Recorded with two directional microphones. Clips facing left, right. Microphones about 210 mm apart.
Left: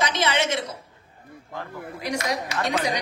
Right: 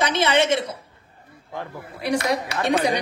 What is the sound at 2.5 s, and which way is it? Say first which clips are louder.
Speech: right 5 dB; 30° right (ahead or behind).